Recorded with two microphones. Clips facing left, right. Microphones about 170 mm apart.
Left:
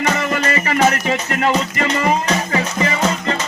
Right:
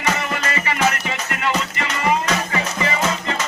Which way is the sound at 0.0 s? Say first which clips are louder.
Left 4 dB; 40° left (ahead or behind).